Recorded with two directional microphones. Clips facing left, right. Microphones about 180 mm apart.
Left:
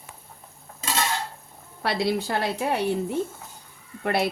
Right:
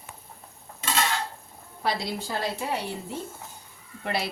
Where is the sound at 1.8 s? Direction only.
65° left (ahead or behind).